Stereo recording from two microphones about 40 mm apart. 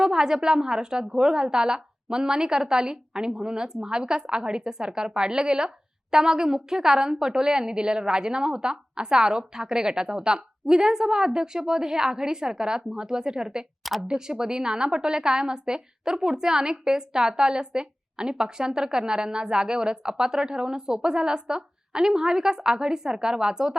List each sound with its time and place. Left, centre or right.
0.0 s a woman's voice: centre